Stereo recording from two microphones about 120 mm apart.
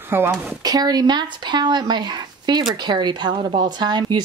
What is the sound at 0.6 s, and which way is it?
Speech, 35° right (ahead or behind).